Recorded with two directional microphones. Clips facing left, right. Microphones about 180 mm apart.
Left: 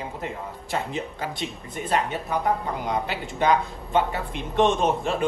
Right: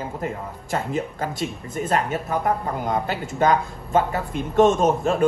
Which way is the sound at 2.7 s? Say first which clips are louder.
Right 3 dB; 50° right (ahead or behind).